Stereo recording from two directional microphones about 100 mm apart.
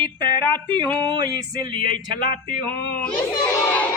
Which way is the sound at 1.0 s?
45° right (ahead or behind).